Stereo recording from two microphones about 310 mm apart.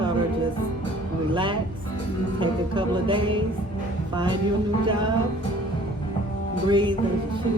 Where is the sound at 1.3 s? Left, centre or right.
Centre.